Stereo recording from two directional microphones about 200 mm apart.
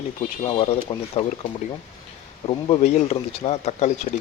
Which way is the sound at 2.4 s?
30° left (ahead or behind).